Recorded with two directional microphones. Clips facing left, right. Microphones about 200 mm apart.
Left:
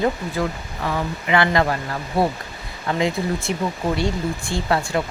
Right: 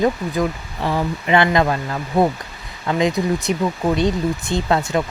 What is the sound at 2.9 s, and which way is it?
Speech, 20° right (ahead or behind).